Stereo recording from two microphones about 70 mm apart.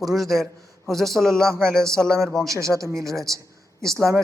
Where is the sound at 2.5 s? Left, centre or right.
Right.